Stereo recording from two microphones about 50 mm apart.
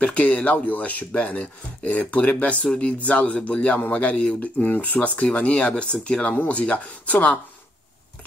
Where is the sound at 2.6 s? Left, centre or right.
Centre.